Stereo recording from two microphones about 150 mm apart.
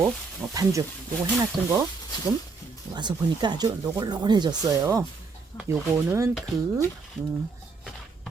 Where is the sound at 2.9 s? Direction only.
30° right (ahead or behind).